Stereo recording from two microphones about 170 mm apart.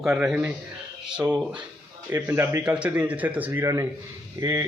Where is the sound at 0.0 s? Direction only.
Centre (ahead or behind).